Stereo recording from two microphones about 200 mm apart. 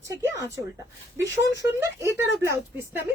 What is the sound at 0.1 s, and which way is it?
Speech, 15° right (ahead or behind).